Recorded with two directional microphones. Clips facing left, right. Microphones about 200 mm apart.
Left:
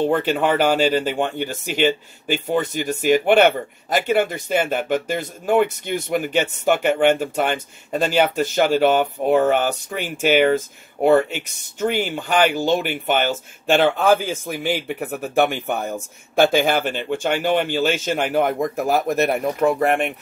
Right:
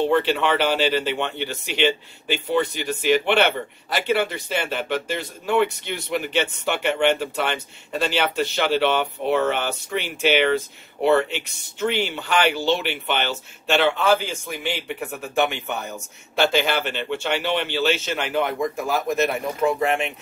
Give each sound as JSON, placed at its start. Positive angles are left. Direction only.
{"t": 0.0, "sound": "speech", "side_deg": 45}